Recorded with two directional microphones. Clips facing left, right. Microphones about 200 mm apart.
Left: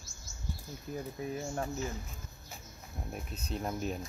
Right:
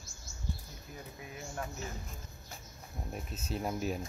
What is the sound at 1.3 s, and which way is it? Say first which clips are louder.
Speech: left 3 dB; 35° left (ahead or behind).